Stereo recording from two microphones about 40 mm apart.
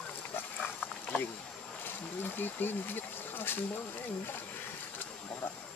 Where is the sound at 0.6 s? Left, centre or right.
Left.